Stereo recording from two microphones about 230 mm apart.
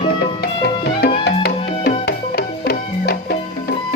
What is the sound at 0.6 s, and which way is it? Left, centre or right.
Music, left.